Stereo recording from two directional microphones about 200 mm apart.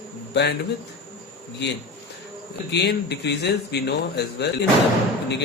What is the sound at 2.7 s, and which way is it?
A man's voice, 55° left (ahead or behind).